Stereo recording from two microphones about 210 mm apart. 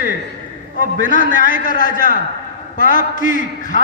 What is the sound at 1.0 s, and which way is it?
A man's voice, 40° left (ahead or behind).